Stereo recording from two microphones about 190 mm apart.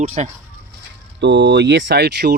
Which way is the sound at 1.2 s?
65° right (ahead or behind).